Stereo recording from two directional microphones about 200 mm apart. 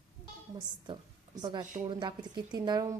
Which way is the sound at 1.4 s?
20° right (ahead or behind).